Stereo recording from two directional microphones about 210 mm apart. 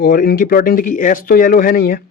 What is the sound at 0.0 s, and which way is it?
Speech, 45° left (ahead or behind).